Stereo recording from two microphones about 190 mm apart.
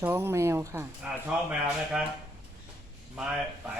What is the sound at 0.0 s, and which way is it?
A man's voice, 15° right (ahead or behind).